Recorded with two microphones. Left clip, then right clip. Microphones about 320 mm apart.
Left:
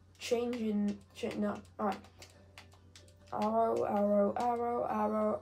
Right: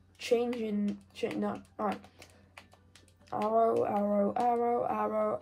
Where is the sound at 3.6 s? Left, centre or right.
Right.